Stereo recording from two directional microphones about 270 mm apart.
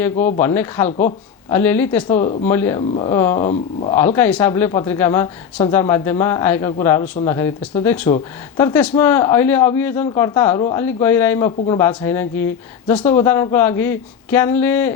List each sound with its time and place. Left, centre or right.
0.3 s a man's voice: centre
0.9 s speech: left
1.5 s a man's voice: centre
2.1 s speech: left
2.4 s a man's voice: centre
3.5 s speech: left
3.9 s a man's voice: centre